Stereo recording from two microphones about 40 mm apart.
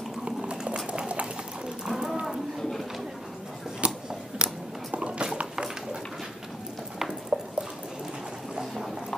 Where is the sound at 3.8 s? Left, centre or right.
Right.